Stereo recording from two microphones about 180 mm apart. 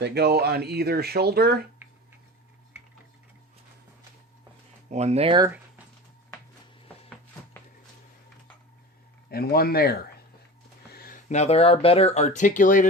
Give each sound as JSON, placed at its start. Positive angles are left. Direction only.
{"t": 0.0, "sound": "speech", "side_deg": -65}
{"t": 4.9, "sound": "speech", "side_deg": -40}
{"t": 9.3, "sound": "speech", "side_deg": 60}